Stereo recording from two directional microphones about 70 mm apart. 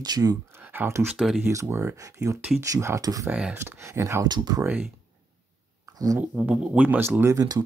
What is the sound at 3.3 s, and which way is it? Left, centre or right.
Speech, centre.